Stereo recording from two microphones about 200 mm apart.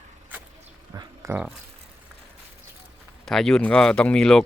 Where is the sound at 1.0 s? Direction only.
15° right (ahead or behind).